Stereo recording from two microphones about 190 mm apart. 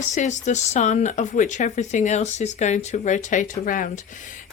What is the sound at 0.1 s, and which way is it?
Speech, 40° left (ahead or behind).